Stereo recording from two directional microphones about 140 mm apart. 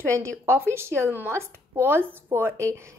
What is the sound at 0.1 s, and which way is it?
Speech, 20° right (ahead or behind).